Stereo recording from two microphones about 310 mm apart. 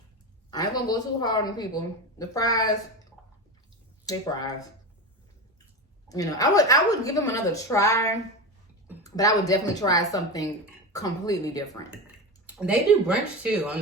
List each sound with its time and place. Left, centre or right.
0.5 s a woman's voice: centre
4.0 s speech: centre
6.1 s a woman's voice: centre
12.5 s speech: centre